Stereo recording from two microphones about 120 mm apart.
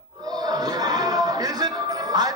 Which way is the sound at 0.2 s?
30° right (ahead or behind).